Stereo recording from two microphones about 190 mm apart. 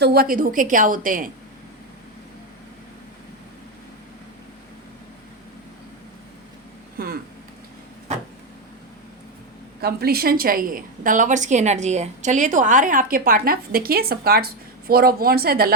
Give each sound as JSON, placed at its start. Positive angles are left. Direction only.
{"t": 0.0, "sound": "a woman's voice", "side_deg": -55}
{"t": 9.8, "sound": "a woman's voice", "side_deg": -55}